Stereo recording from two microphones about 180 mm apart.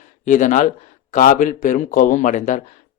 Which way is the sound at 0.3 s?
45° left (ahead or behind).